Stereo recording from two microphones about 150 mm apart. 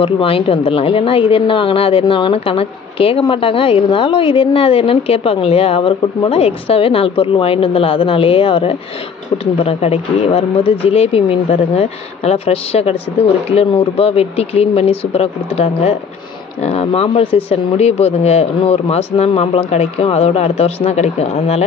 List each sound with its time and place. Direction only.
0.0 s a woman's voice: 40° left (ahead or behind)